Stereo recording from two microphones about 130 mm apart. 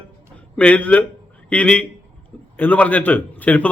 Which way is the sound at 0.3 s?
10° left (ahead or behind).